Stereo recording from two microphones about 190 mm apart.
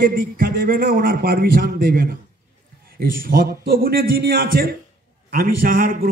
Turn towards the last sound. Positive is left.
turn(degrees=-50)  # may be behind; listen again after turning